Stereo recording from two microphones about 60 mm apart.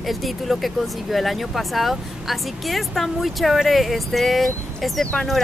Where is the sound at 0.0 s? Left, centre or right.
Centre.